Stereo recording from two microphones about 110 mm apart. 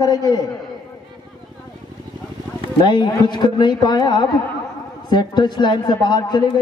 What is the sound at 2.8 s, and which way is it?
A man's voice, 45° left (ahead or behind).